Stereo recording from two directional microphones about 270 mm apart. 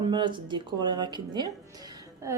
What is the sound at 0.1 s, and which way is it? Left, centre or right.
A woman's voice, centre.